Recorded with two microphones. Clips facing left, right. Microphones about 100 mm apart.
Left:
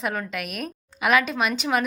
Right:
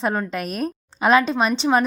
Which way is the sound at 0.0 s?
30° right (ahead or behind).